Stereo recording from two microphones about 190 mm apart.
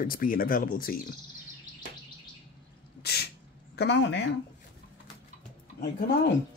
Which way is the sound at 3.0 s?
55° left (ahead or behind).